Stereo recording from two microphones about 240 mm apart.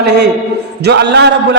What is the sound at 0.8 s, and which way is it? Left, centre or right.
Speech, right.